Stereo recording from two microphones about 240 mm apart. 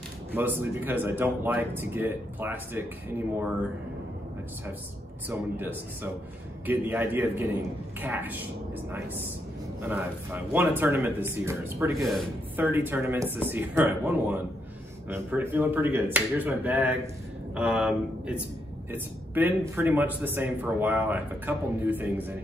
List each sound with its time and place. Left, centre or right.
0.3 s speech: centre
5.3 s speech: centre
9.8 s speech: centre
12.0 s speech: centre